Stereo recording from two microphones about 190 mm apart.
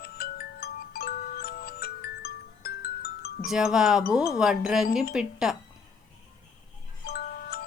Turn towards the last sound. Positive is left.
turn(degrees=50)  # may be behind; listen again after turning